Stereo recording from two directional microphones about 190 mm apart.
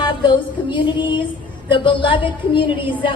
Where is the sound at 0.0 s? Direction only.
25° left (ahead or behind).